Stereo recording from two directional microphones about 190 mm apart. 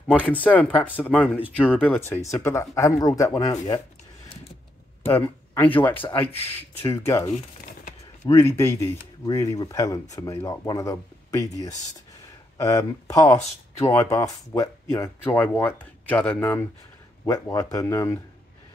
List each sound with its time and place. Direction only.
0.2 s speech: 10° left (ahead or behind)
5.0 s speech: 10° left (ahead or behind)
7.2 s crumpling: 45° left (ahead or behind)
8.3 s speech: 15° left (ahead or behind)